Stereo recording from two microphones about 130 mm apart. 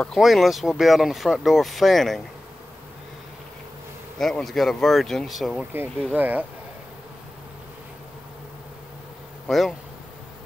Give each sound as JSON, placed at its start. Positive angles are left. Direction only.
{"t": 0.0, "sound": "speech", "side_deg": 0}
{"t": 4.2, "sound": "speech", "side_deg": 5}
{"t": 6.1, "sound": "speech", "side_deg": -15}
{"t": 9.5, "sound": "speech", "side_deg": 0}